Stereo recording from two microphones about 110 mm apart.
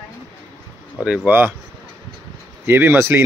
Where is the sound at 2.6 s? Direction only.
20° right (ahead or behind).